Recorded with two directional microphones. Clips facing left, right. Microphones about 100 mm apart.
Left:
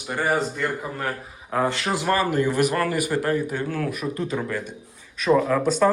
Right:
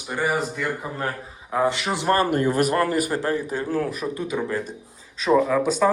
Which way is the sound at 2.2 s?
45° right (ahead or behind).